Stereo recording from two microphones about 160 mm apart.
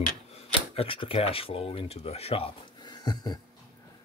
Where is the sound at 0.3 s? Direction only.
35° left (ahead or behind).